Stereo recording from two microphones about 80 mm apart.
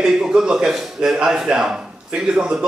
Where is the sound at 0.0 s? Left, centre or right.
Centre.